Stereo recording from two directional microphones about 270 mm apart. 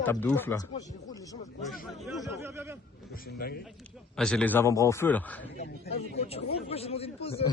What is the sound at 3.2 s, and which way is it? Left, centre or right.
Speech, left.